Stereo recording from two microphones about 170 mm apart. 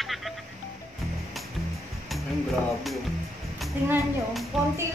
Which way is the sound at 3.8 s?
10° right (ahead or behind).